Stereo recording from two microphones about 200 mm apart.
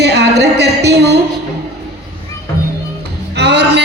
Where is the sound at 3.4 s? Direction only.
55° right (ahead or behind).